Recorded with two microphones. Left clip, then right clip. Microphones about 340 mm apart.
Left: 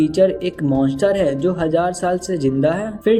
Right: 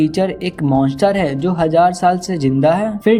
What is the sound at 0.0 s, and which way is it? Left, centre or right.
A man's voice, centre.